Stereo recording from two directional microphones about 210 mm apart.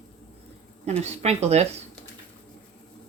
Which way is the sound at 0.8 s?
30° right (ahead or behind).